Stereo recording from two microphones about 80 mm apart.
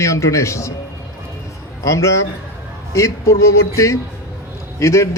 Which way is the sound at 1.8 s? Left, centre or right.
Left.